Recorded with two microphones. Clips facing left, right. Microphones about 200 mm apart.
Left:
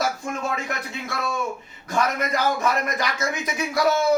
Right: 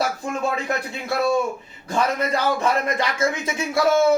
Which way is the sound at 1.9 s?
30° right (ahead or behind).